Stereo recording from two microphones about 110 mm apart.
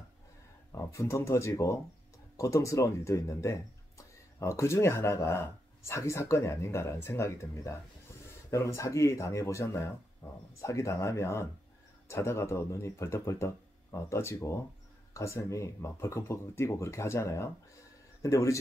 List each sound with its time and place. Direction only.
0.7 s speech: 25° left (ahead or behind)
10.6 s speech: 30° left (ahead or behind)